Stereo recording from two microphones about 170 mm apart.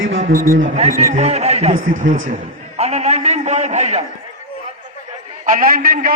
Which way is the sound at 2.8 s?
40° right (ahead or behind).